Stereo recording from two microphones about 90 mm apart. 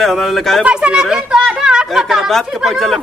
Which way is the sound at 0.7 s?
10° right (ahead or behind).